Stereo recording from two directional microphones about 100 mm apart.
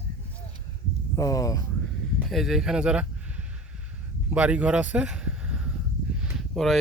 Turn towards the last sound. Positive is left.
turn(degrees=0)  # may be behind; listen again after turning